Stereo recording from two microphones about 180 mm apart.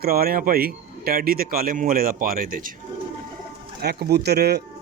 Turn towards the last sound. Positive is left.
turn(degrees=-65)  # may be behind; listen again after turning